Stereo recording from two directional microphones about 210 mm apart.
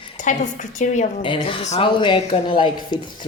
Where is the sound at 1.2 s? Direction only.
25° left (ahead or behind).